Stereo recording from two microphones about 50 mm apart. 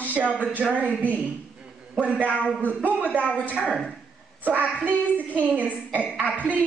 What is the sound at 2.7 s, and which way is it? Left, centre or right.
Speech, right.